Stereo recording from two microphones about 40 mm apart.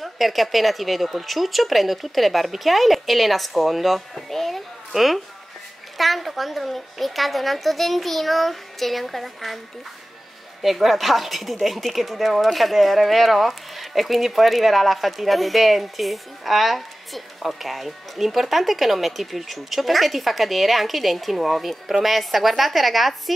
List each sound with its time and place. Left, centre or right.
0.0 s speech: centre
10.6 s speech: centre